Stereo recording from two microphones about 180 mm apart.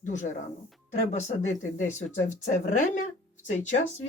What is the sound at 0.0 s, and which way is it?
Speech, 45° left (ahead or behind).